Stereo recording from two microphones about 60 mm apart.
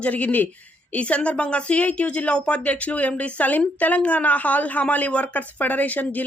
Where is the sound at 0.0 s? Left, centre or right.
Left.